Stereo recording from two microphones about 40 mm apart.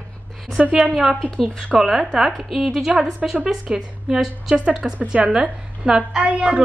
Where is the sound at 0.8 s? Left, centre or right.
Centre.